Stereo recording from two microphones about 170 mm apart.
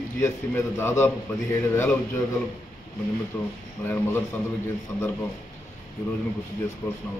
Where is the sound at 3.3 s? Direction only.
10° left (ahead or behind).